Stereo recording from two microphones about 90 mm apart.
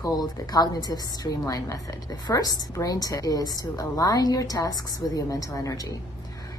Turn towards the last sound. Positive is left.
turn(degrees=40)  # may be behind; listen again after turning